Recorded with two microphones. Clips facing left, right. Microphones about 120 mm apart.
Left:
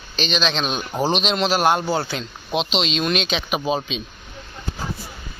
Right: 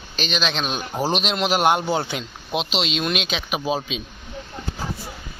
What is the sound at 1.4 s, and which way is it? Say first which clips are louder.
Speech: right 1 dB; 20° right (ahead or behind).